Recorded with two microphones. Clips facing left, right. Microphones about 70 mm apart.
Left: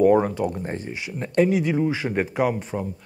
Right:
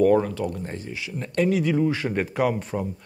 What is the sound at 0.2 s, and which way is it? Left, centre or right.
Speech, left.